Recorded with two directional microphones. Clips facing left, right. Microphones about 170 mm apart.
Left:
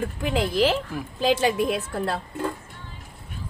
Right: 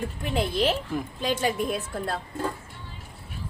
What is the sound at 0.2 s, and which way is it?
Speech, 90° left.